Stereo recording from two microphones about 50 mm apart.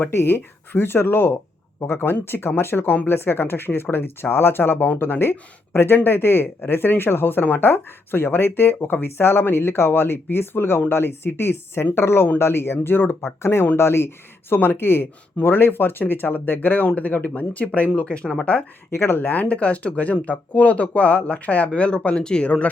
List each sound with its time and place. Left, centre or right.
0.1 s speech: left
18.9 s speech: left